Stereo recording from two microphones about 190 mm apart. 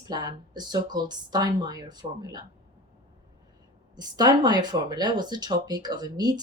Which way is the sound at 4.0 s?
20° right (ahead or behind).